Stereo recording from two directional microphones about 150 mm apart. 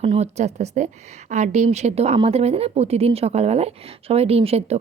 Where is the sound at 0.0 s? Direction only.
45° right (ahead or behind).